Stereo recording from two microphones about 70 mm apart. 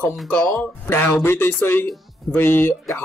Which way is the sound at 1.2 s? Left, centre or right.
Left.